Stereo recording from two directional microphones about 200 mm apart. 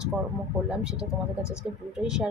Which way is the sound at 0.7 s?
5° right (ahead or behind).